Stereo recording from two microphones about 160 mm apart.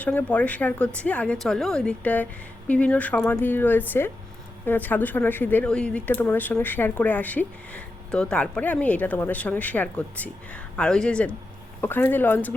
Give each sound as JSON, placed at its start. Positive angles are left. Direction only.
{"t": 0.0, "sound": "speech", "side_deg": 10}